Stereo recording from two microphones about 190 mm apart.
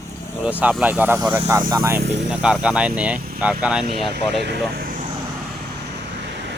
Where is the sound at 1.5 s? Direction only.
20° right (ahead or behind).